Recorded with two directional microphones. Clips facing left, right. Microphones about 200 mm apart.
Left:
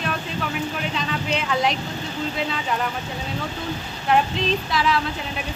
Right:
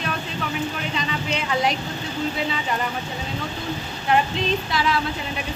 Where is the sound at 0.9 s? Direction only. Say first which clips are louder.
Left 1 dB; centre (ahead or behind).